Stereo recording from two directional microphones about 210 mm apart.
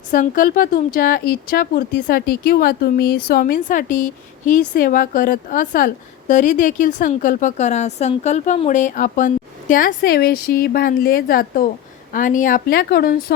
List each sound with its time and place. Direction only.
0.1 s speech: 40° left (ahead or behind)